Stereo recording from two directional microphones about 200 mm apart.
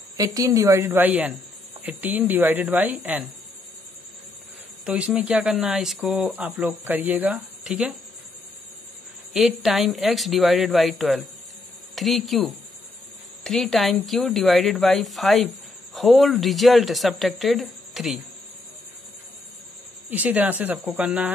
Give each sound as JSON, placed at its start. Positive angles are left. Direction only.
{"t": 0.2, "sound": "speech", "side_deg": -15}
{"t": 4.8, "sound": "speech", "side_deg": -5}
{"t": 9.3, "sound": "speech", "side_deg": 0}
{"t": 20.1, "sound": "speech", "side_deg": -5}